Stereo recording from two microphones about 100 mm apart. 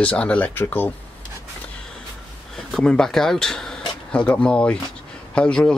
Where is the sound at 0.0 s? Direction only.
10° left (ahead or behind).